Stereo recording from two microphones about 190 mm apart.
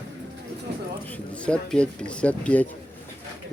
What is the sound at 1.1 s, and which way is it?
Speech, 5° left (ahead or behind).